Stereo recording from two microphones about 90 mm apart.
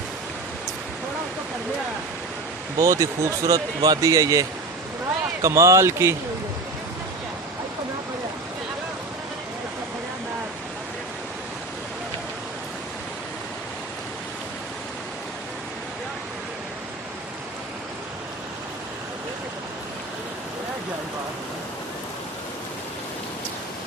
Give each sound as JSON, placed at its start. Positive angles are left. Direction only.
{"t": 2.7, "sound": "speech", "side_deg": -35}